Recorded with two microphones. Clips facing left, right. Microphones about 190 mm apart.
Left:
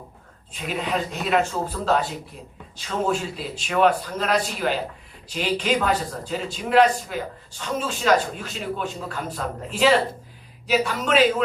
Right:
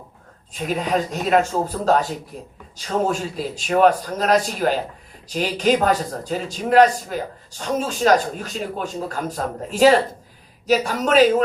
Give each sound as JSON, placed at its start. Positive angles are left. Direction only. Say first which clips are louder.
{"t": 0.5, "sound": "a man's voice", "louder": "right 5 dB", "side_deg": -45}